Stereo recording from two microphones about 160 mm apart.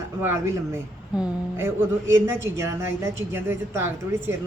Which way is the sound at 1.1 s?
5° right (ahead or behind).